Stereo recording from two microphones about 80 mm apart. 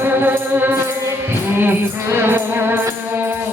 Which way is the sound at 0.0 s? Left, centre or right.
Right.